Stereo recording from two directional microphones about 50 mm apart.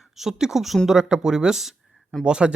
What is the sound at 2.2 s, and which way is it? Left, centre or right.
Speech, centre.